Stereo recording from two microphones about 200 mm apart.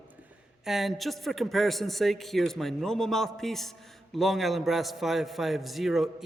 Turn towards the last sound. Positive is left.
turn(degrees=0)  # may be behind; listen again after turning